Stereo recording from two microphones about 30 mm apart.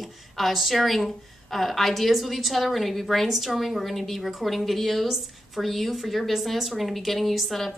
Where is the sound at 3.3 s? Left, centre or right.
Centre.